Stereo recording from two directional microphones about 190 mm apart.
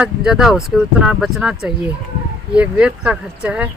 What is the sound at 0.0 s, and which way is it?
Speech, 5° right (ahead or behind).